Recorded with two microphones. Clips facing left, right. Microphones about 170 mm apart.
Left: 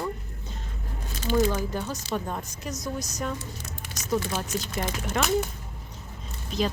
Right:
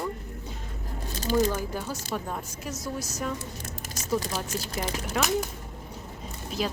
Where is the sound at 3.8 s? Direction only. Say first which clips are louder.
Left 1 dB; 40° right (ahead or behind).